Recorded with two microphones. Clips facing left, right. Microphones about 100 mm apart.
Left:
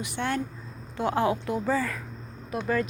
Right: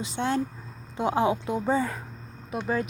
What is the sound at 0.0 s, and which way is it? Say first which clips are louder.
Speech: right 2 dB; 20° right (ahead or behind).